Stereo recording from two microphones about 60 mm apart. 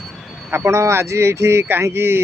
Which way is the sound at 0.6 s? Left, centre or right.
Right.